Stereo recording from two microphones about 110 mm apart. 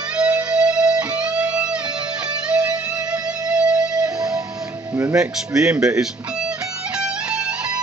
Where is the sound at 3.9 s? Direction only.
35° right (ahead or behind).